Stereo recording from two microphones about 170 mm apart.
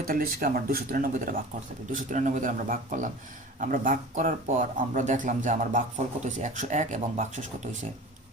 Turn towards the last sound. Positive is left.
turn(degrees=-45)  # may be behind; listen again after turning